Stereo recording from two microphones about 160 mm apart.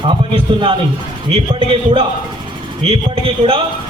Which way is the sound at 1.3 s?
35° right (ahead or behind).